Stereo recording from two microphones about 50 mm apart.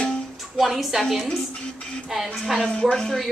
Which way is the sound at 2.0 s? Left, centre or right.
Centre.